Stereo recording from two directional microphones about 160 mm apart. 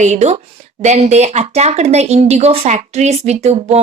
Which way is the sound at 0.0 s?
45° right (ahead or behind).